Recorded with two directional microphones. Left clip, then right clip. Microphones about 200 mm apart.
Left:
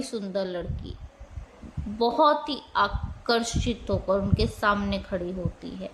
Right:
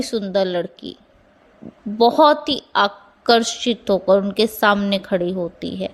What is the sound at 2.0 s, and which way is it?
A woman's voice, 30° right (ahead or behind).